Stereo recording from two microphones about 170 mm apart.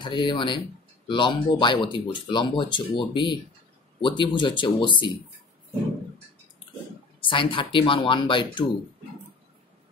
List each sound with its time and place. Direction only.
0.0 s speech: 25° left (ahead or behind)
7.2 s speech: 30° left (ahead or behind)